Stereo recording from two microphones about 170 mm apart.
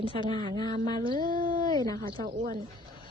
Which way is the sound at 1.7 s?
20° left (ahead or behind).